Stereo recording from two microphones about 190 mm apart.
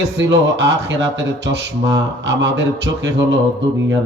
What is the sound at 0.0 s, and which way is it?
A man's voice, 65° right (ahead or behind).